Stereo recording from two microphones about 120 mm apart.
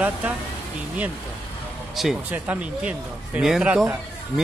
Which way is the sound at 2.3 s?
15° right (ahead or behind).